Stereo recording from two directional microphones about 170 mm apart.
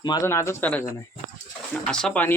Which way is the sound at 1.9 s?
5° left (ahead or behind).